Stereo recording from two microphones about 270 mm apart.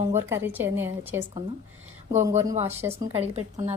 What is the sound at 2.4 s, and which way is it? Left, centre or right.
Speech, right.